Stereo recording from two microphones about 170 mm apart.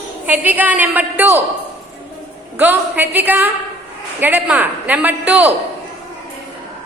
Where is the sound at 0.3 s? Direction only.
10° right (ahead or behind).